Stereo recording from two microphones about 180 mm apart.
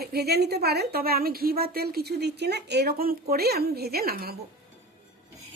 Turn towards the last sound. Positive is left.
turn(degrees=-55)  # may be behind; listen again after turning